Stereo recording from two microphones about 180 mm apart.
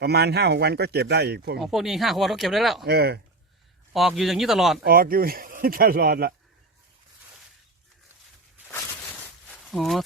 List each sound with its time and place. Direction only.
0.0 s speech: 65° right (ahead or behind)
1.5 s speech: centre (ahead or behind)
2.8 s speech: 60° right (ahead or behind)
3.9 s speech: centre (ahead or behind)
4.8 s speech: 55° right (ahead or behind)
9.5 s a sound: centre (ahead or behind)